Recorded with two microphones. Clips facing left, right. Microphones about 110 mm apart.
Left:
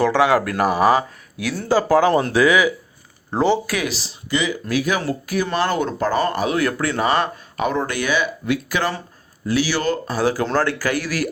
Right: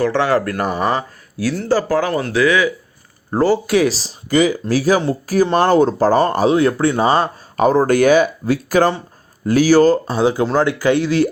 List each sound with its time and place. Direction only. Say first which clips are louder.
0.0 s speech: even; 10° left (ahead or behind)
3.3 s speech: right 3 dB; 5° right (ahead or behind)
3.7 s speech: right 9 dB; 35° right (ahead or behind)